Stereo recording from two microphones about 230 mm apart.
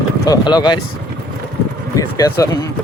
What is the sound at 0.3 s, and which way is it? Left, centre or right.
Speech, centre.